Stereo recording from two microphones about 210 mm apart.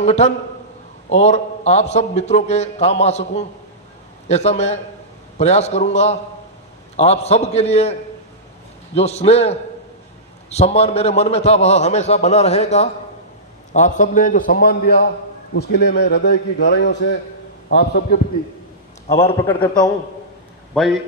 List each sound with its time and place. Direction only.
0.0 s a man's voice: 30° left (ahead or behind); by 18.2 s 50° left (ahead or behind)
19.0 s a man's voice: 30° left (ahead or behind)
19.4 s a man's voice: 10° left (ahead or behind)
20.7 s speech: centre (ahead or behind)